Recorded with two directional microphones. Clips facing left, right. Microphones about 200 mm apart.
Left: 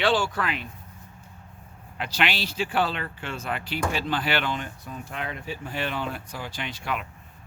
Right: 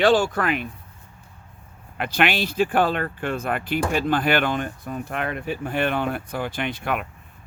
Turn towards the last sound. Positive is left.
turn(degrees=-55)  # may be behind; listen again after turning